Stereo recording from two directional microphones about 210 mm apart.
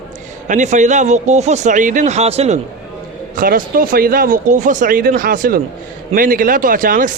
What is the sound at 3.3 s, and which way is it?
Speech, 40° right (ahead or behind).